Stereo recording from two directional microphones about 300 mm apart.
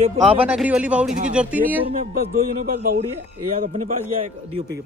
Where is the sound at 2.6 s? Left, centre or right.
Right.